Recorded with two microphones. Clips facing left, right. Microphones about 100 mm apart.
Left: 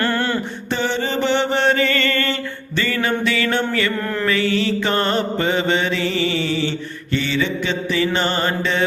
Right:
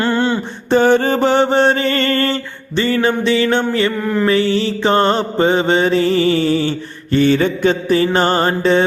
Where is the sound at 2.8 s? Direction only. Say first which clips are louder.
Right 5 dB; 30° right (ahead or behind).